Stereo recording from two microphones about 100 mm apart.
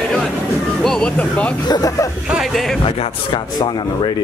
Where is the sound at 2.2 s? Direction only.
5° right (ahead or behind).